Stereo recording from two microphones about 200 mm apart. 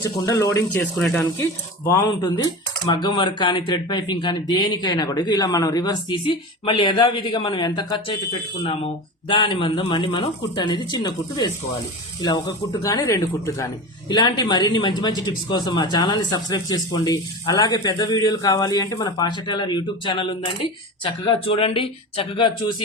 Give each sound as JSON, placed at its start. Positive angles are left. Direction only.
{"t": 0.0, "sound": "speech", "side_deg": 15}
{"t": 0.9, "sound": "speech", "side_deg": 0}
{"t": 1.8, "sound": "speech", "side_deg": 20}
{"t": 12.8, "sound": "speech", "side_deg": 15}